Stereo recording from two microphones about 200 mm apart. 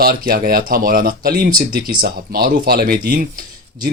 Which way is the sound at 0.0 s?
50° right (ahead or behind).